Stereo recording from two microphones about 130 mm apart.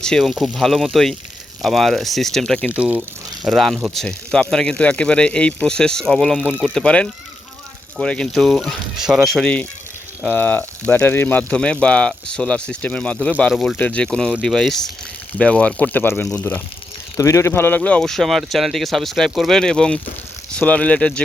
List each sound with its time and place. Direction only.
0.0 s speech: 5° left (ahead or behind)
2.7 s speech: 10° right (ahead or behind)
3.4 s speech: centre (ahead or behind)
13.7 s speech: 10° left (ahead or behind)